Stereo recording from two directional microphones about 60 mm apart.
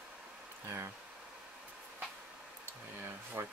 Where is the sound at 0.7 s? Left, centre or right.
Right.